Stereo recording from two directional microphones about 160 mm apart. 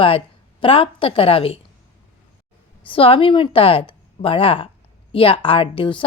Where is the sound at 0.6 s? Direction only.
35° left (ahead or behind).